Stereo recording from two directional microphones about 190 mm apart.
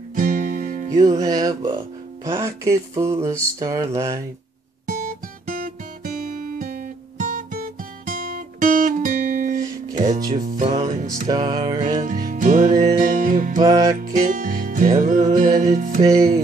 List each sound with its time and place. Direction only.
0.1 s music: 45° right (ahead or behind)
0.8 s music: 20° right (ahead or behind)
2.2 s mantra: 15° right (ahead or behind)
4.8 s guitar: 45° right (ahead or behind)
9.9 s music: 45° right (ahead or behind)
11.2 s music: 20° right (ahead or behind)
12.0 s music: 45° right (ahead or behind)
13.6 s music: 20° right (ahead or behind)
13.9 s music: 45° right (ahead or behind)
16.0 s music: 20° right (ahead or behind)